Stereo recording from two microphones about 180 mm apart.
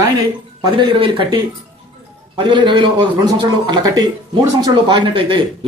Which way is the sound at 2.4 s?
25° right (ahead or behind).